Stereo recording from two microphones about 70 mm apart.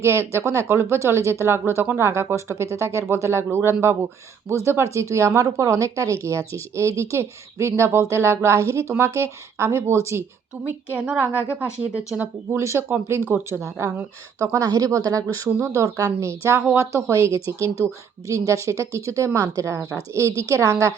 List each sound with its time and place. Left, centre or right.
0.0 s speech: right
11.6 s speech: centre
12.2 s speech: right
14.3 s a woman's voice: right
16.3 s a woman's voice: right